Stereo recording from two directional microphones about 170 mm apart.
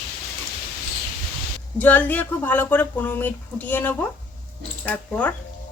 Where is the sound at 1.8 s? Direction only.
10° left (ahead or behind).